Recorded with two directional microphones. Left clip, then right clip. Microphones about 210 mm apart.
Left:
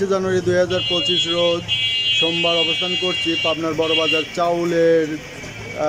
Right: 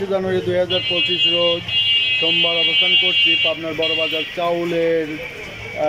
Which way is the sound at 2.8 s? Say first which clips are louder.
Right 6 dB; 10° left (ahead or behind).